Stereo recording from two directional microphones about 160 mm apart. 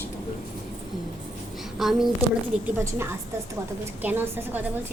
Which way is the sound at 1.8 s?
Centre (ahead or behind).